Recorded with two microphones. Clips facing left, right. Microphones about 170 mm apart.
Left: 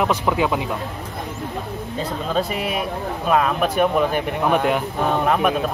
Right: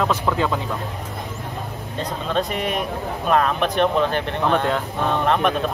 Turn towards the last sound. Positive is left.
turn(degrees=5)  # may be behind; listen again after turning